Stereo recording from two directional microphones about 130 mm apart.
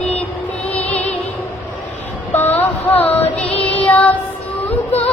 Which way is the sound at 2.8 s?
10° left (ahead or behind).